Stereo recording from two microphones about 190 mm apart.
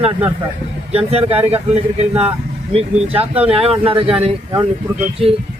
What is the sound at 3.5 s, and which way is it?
Speech, 30° right (ahead or behind).